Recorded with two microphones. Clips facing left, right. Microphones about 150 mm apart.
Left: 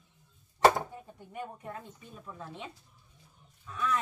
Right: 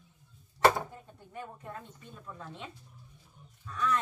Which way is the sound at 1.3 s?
15° left (ahead or behind).